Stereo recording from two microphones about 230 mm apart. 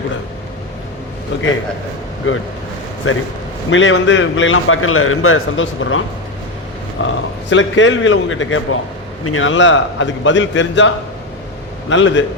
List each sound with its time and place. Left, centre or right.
2.3 s a man's voice: left
7.0 s a man's voice: left